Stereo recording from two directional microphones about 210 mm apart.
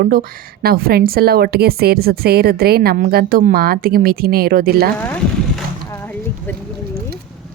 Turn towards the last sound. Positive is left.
turn(degrees=5)  # may be behind; listen again after turning